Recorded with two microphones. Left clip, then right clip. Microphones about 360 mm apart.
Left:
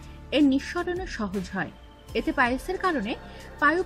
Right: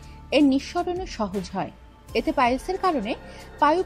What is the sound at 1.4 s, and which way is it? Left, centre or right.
Speech, right.